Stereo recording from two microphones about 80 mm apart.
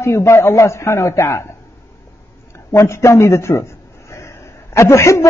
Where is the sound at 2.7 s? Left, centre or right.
Left.